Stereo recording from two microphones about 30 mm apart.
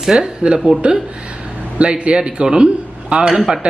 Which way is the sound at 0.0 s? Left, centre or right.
Centre.